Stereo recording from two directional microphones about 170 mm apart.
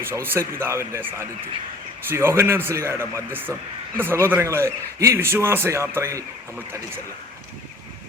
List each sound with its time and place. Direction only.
0.0 s a man's voice: 15° right (ahead or behind)